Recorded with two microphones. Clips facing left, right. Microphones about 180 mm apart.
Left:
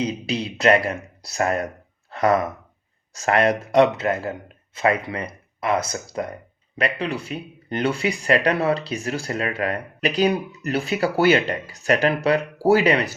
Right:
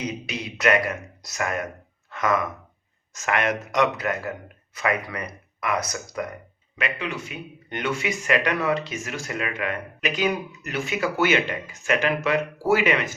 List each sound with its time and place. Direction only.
0.0 s speech: 30° left (ahead or behind)